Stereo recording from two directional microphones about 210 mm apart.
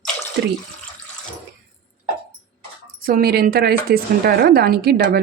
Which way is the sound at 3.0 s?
45° right (ahead or behind).